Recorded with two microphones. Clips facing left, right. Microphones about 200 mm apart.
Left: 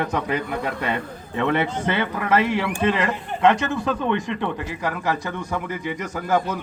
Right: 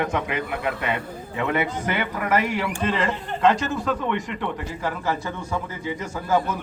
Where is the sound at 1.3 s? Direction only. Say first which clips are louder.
Left 3 dB; 30° left (ahead or behind).